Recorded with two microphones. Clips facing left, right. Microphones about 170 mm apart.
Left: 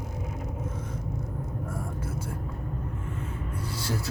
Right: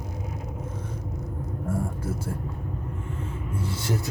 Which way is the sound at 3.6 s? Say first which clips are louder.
Right 3 dB; 25° right (ahead or behind).